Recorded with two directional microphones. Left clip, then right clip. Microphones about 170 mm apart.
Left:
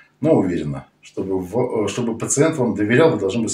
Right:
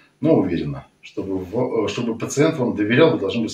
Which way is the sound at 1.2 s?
15° left (ahead or behind).